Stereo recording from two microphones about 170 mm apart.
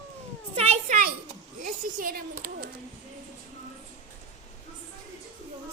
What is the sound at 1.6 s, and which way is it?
A child's voice, 55° right (ahead or behind).